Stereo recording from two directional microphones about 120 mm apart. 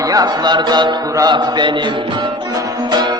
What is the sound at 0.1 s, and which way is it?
Music, 35° right (ahead or behind).